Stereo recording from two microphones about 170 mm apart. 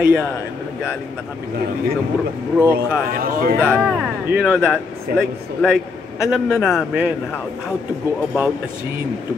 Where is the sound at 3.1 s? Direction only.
60° right (ahead or behind).